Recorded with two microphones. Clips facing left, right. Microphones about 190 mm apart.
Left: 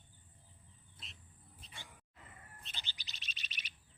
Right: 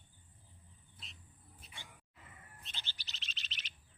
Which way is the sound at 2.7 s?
15° left (ahead or behind).